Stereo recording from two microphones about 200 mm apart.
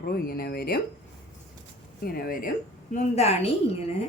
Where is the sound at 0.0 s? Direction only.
50° left (ahead or behind).